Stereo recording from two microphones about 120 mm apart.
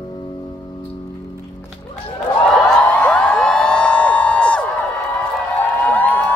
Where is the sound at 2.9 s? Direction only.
15° left (ahead or behind).